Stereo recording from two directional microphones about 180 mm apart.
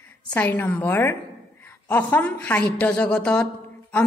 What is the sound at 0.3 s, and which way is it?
A woman's voice, 10° left (ahead or behind).